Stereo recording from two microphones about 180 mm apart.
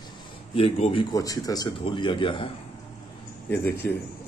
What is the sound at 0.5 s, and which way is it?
Speech, 30° left (ahead or behind).